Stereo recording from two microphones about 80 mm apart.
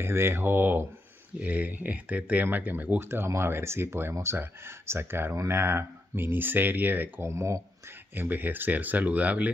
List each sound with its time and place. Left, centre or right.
0.0 s speech: right
7.2 s speech: right
8.1 s speech: right